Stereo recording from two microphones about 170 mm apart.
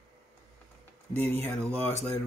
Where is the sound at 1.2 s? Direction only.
10° left (ahead or behind).